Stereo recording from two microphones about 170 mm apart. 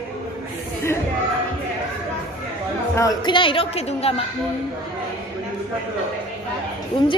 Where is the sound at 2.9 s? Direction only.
25° left (ahead or behind).